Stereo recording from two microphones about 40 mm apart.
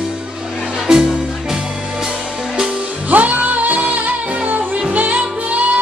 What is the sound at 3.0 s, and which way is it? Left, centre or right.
Music, right.